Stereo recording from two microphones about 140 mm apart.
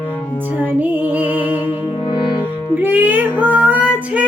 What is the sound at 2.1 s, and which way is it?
Music, 35° left (ahead or behind).